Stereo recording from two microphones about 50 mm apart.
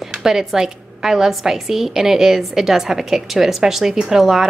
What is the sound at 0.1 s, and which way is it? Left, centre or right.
A woman's voice, centre.